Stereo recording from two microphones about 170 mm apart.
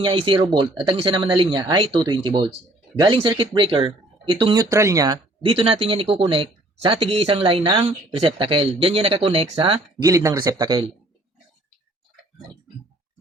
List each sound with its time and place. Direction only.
0.0 s speech: 30° right (ahead or behind)
4.6 s speech: 15° right (ahead or behind)
10.0 s speech: 20° right (ahead or behind)